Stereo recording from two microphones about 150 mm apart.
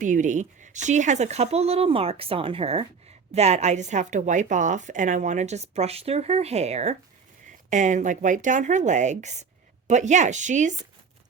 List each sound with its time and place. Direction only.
0.0 s a woman's voice: 55° right (ahead or behind)